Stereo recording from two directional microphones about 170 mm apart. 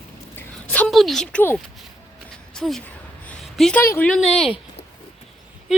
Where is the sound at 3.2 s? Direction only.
Centre (ahead or behind).